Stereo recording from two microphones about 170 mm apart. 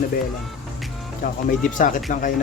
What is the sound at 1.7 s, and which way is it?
Speech, 50° left (ahead or behind).